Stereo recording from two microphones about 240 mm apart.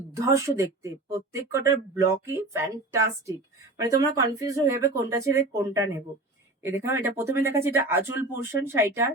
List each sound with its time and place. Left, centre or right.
0.1 s speech: centre